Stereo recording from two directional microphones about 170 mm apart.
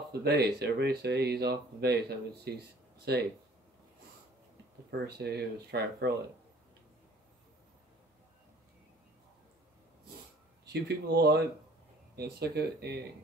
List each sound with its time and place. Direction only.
0.2 s speech: 75° right (ahead or behind)
4.9 s speech: 70° right (ahead or behind)
10.7 s speech: 70° right (ahead or behind)